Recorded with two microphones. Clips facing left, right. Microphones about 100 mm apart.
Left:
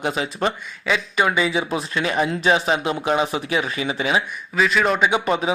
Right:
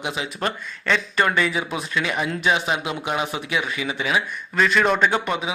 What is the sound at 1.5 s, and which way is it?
Speech, 35° left (ahead or behind).